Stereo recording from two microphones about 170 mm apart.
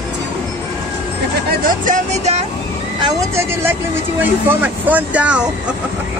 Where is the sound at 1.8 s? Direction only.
45° right (ahead or behind).